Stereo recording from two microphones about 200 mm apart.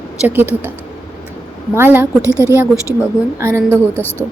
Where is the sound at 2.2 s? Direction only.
15° left (ahead or behind).